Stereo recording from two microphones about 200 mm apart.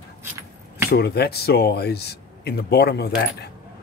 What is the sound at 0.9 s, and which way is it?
Speech, 55° left (ahead or behind).